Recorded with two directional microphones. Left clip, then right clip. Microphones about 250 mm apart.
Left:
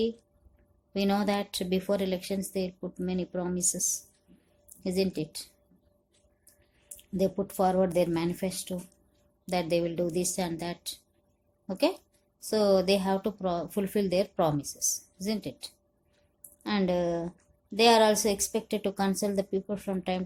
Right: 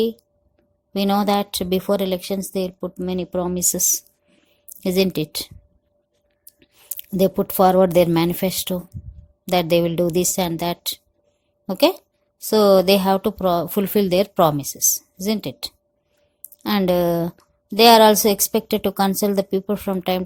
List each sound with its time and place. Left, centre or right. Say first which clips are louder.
0.9 s a woman's voice: right 9 dB; right
6.8 s a woman's voice: right 10 dB; right